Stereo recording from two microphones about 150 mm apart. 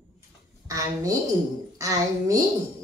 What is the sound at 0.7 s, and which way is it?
A child's voice, 20° right (ahead or behind).